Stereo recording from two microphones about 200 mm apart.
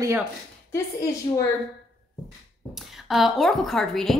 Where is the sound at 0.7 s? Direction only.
15° left (ahead or behind).